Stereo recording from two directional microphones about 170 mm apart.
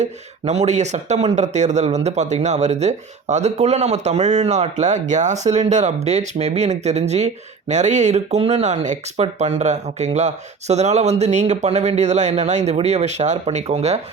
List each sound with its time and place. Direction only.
0.0 s speech: 40° right (ahead or behind)